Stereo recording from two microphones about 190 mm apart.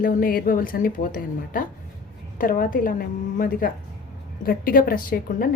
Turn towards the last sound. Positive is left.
turn(degrees=50)  # may be behind; listen again after turning